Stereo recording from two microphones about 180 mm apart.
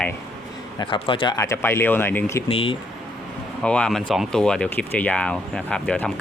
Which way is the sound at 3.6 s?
5° left (ahead or behind).